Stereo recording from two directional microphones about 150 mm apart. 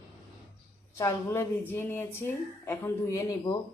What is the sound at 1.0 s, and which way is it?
Speech, 15° left (ahead or behind).